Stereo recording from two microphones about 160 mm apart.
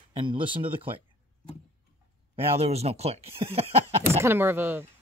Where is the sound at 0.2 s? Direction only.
30° right (ahead or behind).